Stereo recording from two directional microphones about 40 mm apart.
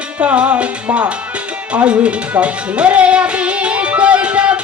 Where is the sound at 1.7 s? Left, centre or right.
Right.